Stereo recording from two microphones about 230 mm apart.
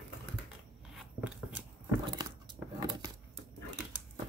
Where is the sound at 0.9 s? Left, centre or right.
Centre.